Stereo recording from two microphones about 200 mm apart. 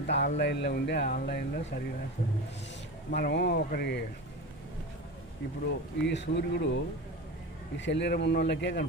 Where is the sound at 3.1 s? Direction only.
50° left (ahead or behind).